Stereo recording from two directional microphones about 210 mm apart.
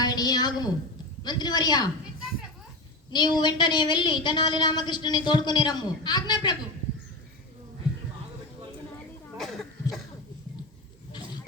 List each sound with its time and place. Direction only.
0.0 s a sound: 20° left (ahead or behind)
1.2 s a woman's voice: 20° left (ahead or behind)
3.1 s a woman's voice: 20° left (ahead or behind)
9.4 s speech: centre (ahead or behind)